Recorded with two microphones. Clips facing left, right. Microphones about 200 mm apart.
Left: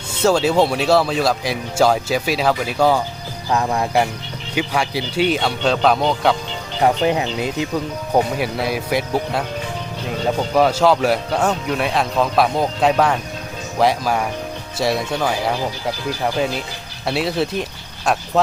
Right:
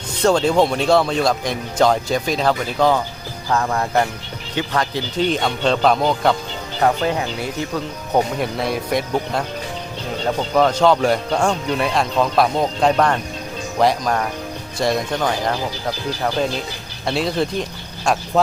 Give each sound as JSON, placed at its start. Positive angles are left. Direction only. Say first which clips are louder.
{"t": 0.2, "sound": "speech", "louder": "even", "side_deg": 5}
{"t": 6.8, "sound": "speech", "louder": "left 2 dB", "side_deg": 20}
{"t": 8.1, "sound": "speech", "louder": "left 1 dB", "side_deg": 5}
{"t": 10.5, "sound": "speech", "louder": "even", "side_deg": 10}
{"t": 17.1, "sound": "speech", "louder": "even", "side_deg": 5}